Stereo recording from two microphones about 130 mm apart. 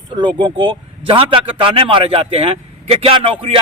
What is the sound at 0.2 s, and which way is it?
Speech, 35° right (ahead or behind).